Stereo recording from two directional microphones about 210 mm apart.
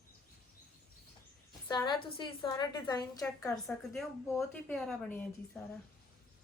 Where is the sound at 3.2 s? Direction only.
5° left (ahead or behind).